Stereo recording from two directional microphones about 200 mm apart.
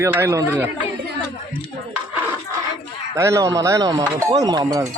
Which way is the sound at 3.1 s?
15° right (ahead or behind).